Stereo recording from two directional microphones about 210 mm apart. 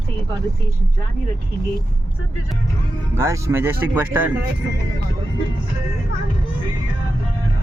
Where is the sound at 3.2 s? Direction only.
15° right (ahead or behind).